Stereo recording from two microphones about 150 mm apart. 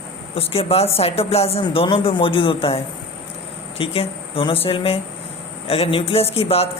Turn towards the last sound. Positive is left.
turn(degrees=40)  # may be behind; listen again after turning